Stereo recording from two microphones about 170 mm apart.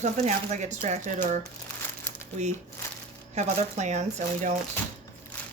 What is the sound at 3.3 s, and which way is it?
Speech, 45° right (ahead or behind).